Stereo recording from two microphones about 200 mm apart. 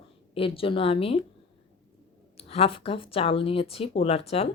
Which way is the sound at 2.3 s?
30° left (ahead or behind).